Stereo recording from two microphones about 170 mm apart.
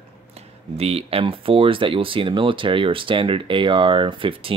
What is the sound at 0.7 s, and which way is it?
Speech, 35° right (ahead or behind).